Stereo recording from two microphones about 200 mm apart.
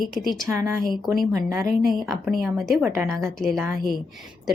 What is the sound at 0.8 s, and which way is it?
Speech, centre (ahead or behind).